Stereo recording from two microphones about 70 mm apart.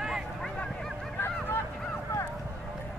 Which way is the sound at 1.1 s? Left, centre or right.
Left.